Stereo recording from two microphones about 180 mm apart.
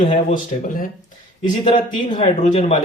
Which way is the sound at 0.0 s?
45° left (ahead or behind).